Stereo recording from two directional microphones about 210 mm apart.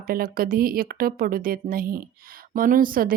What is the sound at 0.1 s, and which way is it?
Speech, 45° right (ahead or behind).